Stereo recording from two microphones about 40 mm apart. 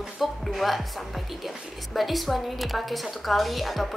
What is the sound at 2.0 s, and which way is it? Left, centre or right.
Speech, centre.